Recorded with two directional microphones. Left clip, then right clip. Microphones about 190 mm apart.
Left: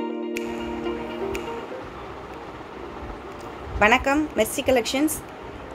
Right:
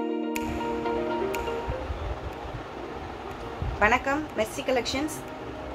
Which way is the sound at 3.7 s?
50° left (ahead or behind).